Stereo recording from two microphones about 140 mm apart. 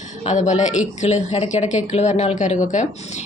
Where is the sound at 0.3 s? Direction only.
55° left (ahead or behind).